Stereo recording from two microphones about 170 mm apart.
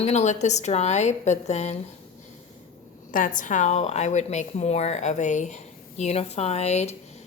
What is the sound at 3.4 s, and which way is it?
A woman's voice, 45° left (ahead or behind).